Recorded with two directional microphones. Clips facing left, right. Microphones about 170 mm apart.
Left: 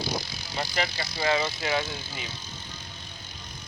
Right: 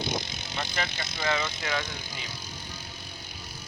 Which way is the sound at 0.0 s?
20° right (ahead or behind).